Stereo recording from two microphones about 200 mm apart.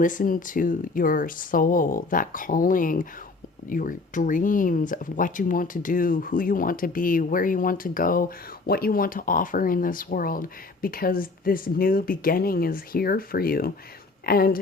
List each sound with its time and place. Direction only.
0.0 s speech: 40° left (ahead or behind)